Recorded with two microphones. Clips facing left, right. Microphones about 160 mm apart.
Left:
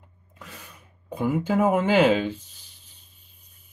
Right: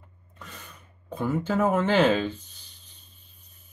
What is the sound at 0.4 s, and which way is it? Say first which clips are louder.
Speech: left 1 dB; 10° left (ahead or behind).